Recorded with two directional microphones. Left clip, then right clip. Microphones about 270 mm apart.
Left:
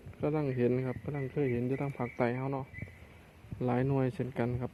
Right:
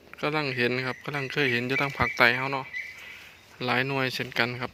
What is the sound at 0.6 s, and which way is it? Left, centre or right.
Speech, centre.